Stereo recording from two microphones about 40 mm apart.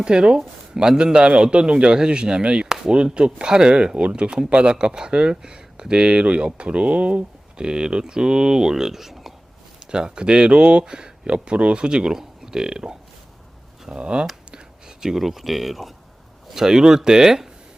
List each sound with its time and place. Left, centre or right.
0.0 s speech: right; by 9.3 s centre
9.8 s speech: right
14.5 s a sound: centre
15.2 s speech: centre
16.5 s speech: centre